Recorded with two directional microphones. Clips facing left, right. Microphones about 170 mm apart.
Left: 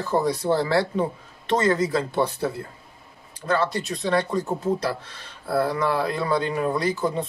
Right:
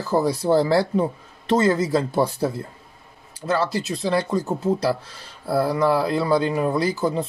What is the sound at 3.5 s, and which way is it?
Speech, 30° right (ahead or behind).